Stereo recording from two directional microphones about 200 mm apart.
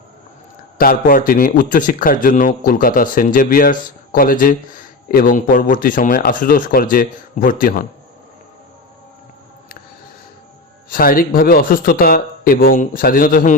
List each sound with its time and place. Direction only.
0.8 s a man's voice: 45° left (ahead or behind)
10.8 s a man's voice: 45° left (ahead or behind)